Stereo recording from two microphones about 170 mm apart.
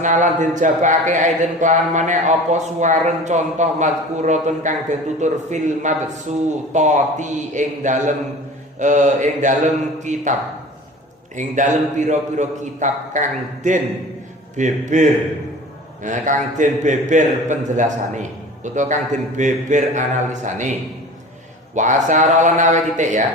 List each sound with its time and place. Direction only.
0.0 s speech: 45° right (ahead or behind)
11.3 s speech: 45° right (ahead or behind)
21.8 s speech: 45° right (ahead or behind)